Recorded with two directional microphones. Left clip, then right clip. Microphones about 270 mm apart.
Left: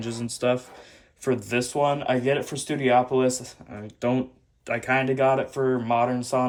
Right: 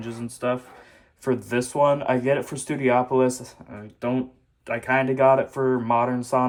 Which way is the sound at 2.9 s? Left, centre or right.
Right.